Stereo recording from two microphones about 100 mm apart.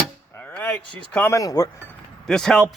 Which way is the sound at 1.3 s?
40° left (ahead or behind).